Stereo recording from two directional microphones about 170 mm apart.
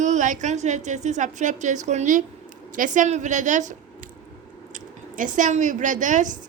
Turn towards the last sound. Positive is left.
turn(degrees=-50)  # may be behind; listen again after turning